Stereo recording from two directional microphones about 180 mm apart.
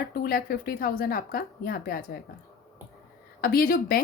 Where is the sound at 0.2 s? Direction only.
55° left (ahead or behind).